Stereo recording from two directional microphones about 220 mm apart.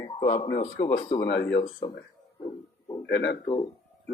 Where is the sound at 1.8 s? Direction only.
20° left (ahead or behind).